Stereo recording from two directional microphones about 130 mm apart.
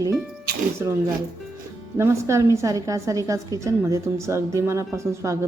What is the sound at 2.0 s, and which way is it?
A woman's voice, 20° right (ahead or behind).